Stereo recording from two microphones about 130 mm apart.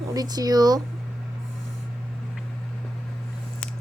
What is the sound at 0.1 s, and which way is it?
Speech, 30° right (ahead or behind).